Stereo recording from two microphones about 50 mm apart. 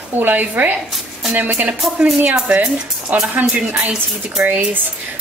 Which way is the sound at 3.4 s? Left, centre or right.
Right.